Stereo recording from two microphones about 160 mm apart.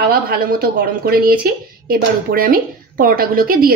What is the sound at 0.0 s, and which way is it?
A woman's voice, 70° right (ahead or behind).